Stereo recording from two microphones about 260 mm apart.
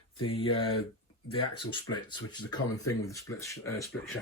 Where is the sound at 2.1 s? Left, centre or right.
Centre.